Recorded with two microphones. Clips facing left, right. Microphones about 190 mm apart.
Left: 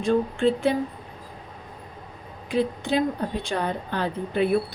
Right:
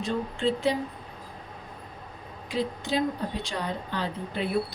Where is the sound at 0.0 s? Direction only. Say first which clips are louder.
Left 6 dB; 50° left (ahead or behind).